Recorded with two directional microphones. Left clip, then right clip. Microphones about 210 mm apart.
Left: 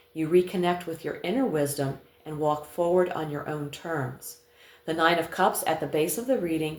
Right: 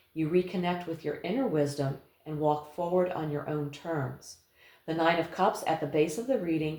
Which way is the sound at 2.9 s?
45° left (ahead or behind).